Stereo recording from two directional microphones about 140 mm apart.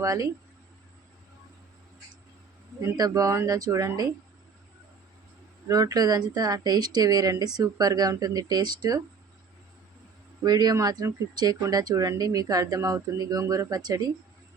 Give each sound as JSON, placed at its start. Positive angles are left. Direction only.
{"t": 0.0, "sound": "speech", "side_deg": -20}
{"t": 2.8, "sound": "speech", "side_deg": -25}
{"t": 5.6, "sound": "speech", "side_deg": -25}
{"t": 10.4, "sound": "speech", "side_deg": -30}